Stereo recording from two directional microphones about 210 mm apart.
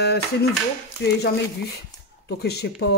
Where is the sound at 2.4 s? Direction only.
50° left (ahead or behind).